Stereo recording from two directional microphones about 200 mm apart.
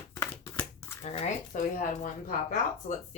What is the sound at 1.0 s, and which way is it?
Speech, 30° left (ahead or behind).